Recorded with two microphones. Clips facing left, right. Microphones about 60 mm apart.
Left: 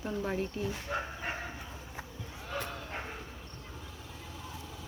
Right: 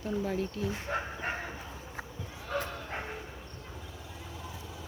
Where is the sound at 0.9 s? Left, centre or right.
Right.